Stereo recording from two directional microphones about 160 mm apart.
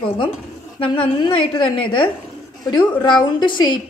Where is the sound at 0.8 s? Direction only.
35° left (ahead or behind).